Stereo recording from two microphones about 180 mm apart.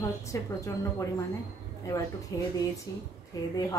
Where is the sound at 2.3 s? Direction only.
20° left (ahead or behind).